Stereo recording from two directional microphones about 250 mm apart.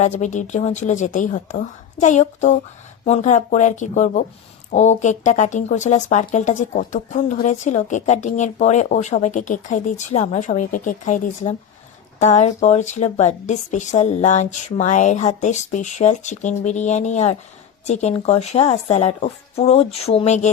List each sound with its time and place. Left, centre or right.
0.0 s speech: left